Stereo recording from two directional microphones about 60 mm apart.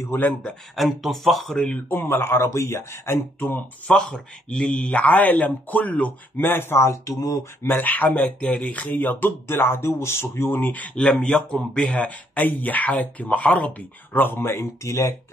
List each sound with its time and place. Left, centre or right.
0.0 s a man's voice: left
0.7 s speech: centre
1.9 s a man's voice: left
3.8 s speech: centre; by 7.3 s left
7.6 s speech: left
8.1 s speech: centre
8.6 s speech: left
11.0 s speech: centre; by 15.1 s left